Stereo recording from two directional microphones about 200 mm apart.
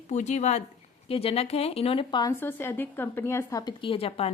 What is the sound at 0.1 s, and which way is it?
A woman's voice, 35° left (ahead or behind).